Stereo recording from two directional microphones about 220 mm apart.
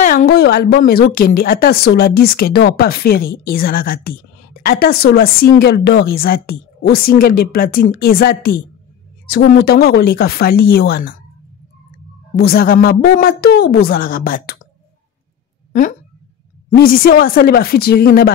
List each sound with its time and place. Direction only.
0.0 s a woman's voice: 40° left (ahead or behind)
12.4 s a woman's voice: 45° left (ahead or behind)
16.7 s a woman's voice: 40° left (ahead or behind)